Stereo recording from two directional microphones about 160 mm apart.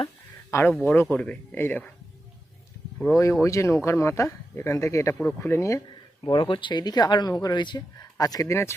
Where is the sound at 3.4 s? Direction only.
20° left (ahead or behind).